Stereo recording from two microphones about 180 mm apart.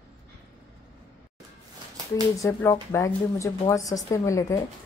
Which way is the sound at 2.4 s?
15° left (ahead or behind).